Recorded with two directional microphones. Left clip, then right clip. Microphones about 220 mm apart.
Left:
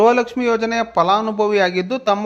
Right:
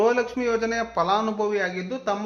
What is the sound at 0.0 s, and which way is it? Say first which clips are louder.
A man's voice: left 7 dB; 30° left (ahead or behind).